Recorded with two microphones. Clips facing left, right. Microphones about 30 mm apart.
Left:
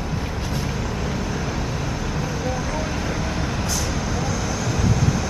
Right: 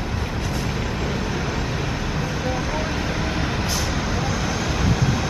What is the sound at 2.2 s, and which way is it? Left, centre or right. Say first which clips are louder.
Vehicle: right 1 dB; right.